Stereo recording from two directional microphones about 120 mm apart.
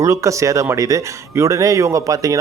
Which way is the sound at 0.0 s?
25° right (ahead or behind).